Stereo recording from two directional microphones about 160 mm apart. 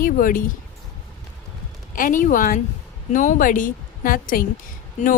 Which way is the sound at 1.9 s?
55° left (ahead or behind).